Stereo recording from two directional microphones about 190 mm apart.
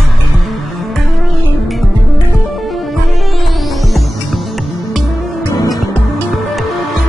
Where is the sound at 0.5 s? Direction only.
Centre (ahead or behind).